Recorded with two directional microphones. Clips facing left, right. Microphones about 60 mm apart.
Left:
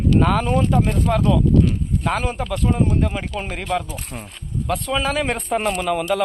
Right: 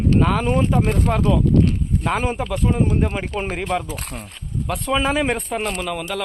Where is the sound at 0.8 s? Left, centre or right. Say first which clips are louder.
Right 1 dB; right.